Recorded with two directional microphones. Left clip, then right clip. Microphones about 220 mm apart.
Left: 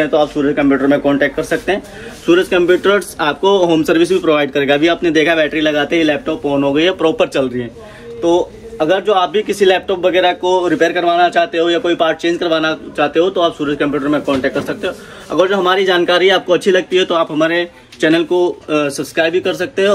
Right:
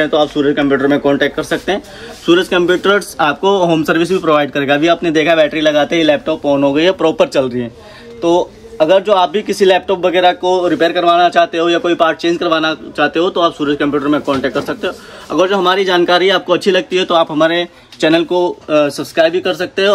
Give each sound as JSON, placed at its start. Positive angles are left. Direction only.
{"t": 0.0, "sound": "speech", "side_deg": -40}